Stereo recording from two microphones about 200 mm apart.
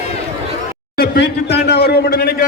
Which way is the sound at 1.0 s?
55° left (ahead or behind).